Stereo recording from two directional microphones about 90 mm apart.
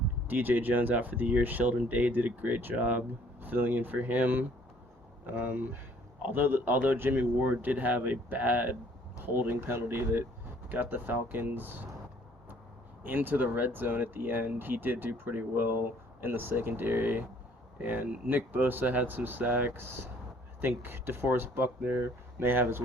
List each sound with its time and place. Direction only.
0.3 s speech: 20° right (ahead or behind)
13.0 s speech: 20° right (ahead or behind)